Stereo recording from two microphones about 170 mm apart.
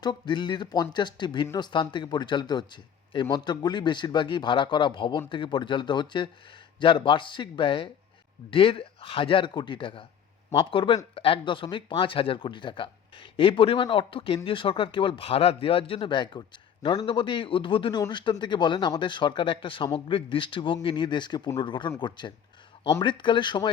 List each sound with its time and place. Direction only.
0.0 s speech: 25° left (ahead or behind)